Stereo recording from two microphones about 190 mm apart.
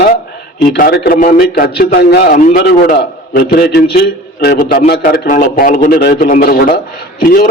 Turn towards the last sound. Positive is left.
turn(degrees=50)  # may be behind; listen again after turning